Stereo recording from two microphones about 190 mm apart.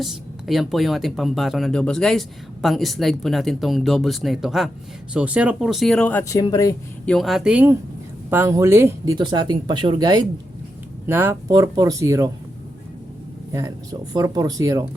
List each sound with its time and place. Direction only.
0.0 s speech: centre (ahead or behind); by 6.7 s 20° left (ahead or behind)
7.0 s speech: centre (ahead or behind); by 12.3 s 15° right (ahead or behind)
14.1 s speech: 20° right (ahead or behind)